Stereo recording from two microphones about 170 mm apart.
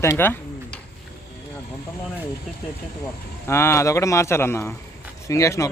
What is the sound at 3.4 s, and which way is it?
A man's voice, 15° left (ahead or behind).